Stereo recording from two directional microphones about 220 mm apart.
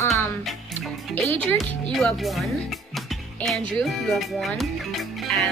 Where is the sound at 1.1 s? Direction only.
5° left (ahead or behind).